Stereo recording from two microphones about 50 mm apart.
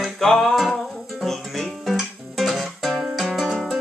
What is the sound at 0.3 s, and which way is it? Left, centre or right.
Music, centre.